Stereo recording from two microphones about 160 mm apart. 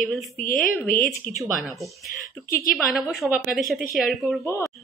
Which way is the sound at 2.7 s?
Centre (ahead or behind).